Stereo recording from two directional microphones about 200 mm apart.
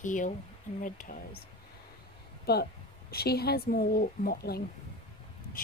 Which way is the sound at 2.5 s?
50° left (ahead or behind).